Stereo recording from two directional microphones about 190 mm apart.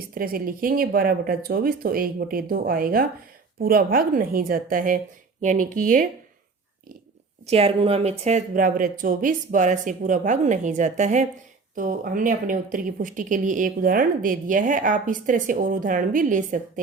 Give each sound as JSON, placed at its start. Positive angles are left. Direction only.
{"t": 0.1, "sound": "speech", "side_deg": -50}
{"t": 7.4, "sound": "speech", "side_deg": -30}